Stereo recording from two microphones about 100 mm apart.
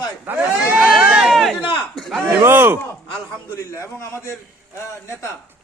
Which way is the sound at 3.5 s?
30° left (ahead or behind).